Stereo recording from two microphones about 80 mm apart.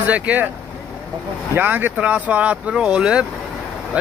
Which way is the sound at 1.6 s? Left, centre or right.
Right.